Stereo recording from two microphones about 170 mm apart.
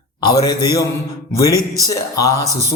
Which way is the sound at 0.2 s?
25° left (ahead or behind).